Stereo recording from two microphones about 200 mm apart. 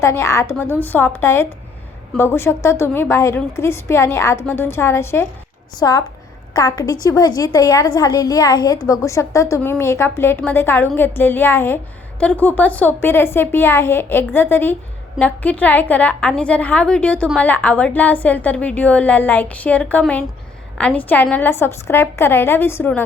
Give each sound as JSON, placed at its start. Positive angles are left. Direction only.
{"t": 0.0, "sound": "a woman's voice", "side_deg": 15}